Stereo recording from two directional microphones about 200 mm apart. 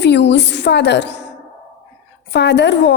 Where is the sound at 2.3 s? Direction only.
60° left (ahead or behind).